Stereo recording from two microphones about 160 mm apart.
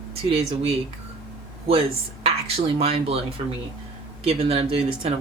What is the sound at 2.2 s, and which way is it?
Speech, 40° right (ahead or behind).